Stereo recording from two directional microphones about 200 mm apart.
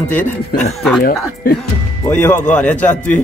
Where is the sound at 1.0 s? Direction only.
50° left (ahead or behind).